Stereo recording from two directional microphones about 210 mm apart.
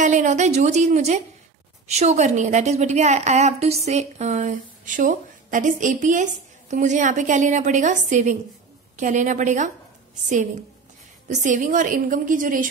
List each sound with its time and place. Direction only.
0.0 s a woman's voice: 35° right (ahead or behind)